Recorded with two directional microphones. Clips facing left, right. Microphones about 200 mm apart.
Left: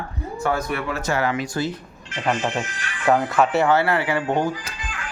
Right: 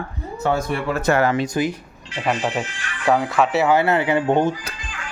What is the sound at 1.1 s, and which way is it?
Speech, 50° right (ahead or behind).